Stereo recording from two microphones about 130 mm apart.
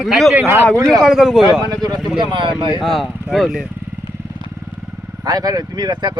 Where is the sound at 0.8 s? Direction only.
30° right (ahead or behind).